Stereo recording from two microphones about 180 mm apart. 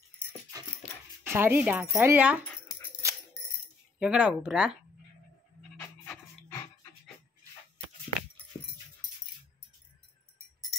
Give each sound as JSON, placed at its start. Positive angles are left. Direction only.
{"t": 1.2, "sound": "speech", "side_deg": -15}
{"t": 3.0, "sound": "music", "side_deg": -15}
{"t": 4.0, "sound": "speech", "side_deg": -5}
{"t": 5.6, "sound": "pant", "side_deg": 5}